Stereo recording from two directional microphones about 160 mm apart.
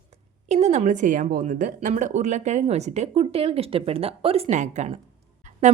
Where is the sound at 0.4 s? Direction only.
45° right (ahead or behind).